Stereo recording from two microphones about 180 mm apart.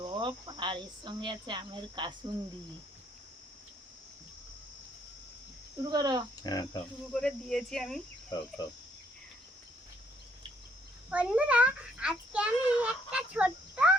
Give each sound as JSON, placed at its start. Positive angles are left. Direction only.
{"t": 0.0, "sound": "speech", "side_deg": -25}
{"t": 5.8, "sound": "speech", "side_deg": -20}
{"t": 6.4, "sound": "speech", "side_deg": 20}
{"t": 7.1, "sound": "speech", "side_deg": 5}
{"t": 8.3, "sound": "speech", "side_deg": 20}
{"t": 11.1, "sound": "a sound", "side_deg": -5}